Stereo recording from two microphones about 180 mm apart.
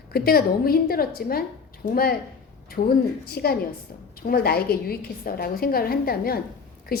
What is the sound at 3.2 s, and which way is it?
A woman's voice, 60° left (ahead or behind).